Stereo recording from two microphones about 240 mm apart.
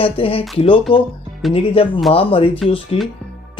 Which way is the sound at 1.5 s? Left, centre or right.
Left.